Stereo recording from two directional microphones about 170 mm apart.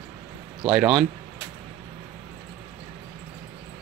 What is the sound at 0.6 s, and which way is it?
Speech, 5° right (ahead or behind).